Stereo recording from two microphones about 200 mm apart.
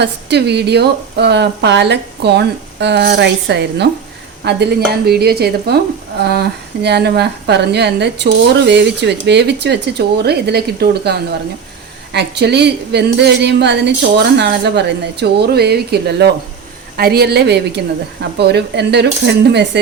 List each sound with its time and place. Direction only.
0.0 s speech: 55° right (ahead or behind)